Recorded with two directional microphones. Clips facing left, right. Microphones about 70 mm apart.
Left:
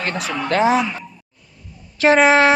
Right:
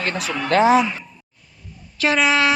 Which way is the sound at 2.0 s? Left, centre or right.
Left.